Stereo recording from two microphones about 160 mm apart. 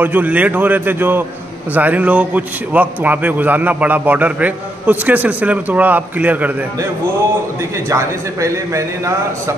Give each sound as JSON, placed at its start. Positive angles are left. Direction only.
{"t": 0.0, "sound": "a man's voice", "side_deg": -10}
{"t": 7.9, "sound": "a man's voice", "side_deg": -20}